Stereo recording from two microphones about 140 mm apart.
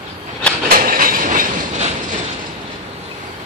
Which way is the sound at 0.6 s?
90° right.